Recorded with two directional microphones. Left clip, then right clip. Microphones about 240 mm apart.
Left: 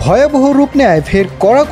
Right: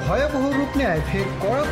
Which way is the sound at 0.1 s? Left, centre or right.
Left.